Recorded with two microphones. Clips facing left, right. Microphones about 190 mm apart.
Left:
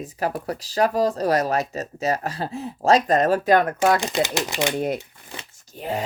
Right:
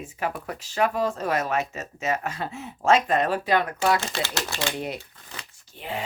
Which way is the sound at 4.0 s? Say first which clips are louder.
Left 6 dB; 20° left (ahead or behind).